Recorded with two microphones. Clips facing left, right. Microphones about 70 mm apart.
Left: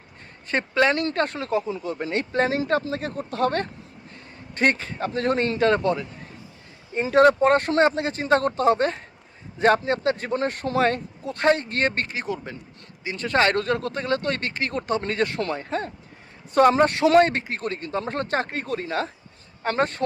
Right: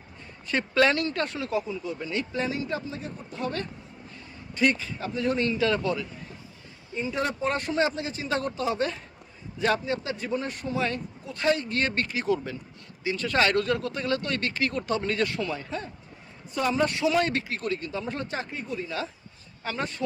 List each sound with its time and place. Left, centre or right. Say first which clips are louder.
0.7 s speech: left 2 dB; left
1.0 s speech: left 4 dB; left
1.7 s speech: left 4 dB; left
2.6 s speech: left 8 dB; left
7.0 s speech: left 12 dB; left
15.5 s speech: left 6 dB; left
17.2 s speech: left 2 dB; left
18.1 s speech: left 7 dB; left